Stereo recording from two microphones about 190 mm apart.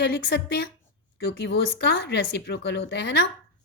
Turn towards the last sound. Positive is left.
turn(degrees=60)  # may be behind; listen again after turning